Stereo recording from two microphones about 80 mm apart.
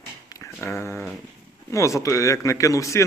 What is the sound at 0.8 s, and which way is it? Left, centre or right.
Speech, left.